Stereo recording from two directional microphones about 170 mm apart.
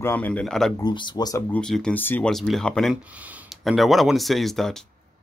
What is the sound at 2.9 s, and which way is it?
Speech, 10° right (ahead or behind).